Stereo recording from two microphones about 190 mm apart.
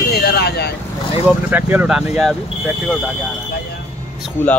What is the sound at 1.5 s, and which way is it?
Speech, 10° right (ahead or behind).